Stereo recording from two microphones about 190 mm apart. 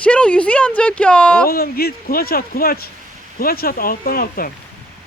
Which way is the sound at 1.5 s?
50° left (ahead or behind).